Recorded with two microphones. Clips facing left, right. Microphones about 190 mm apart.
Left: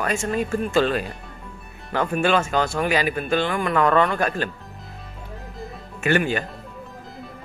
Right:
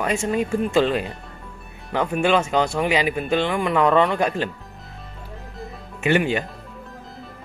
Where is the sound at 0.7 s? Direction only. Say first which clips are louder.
Even; 20° right (ahead or behind).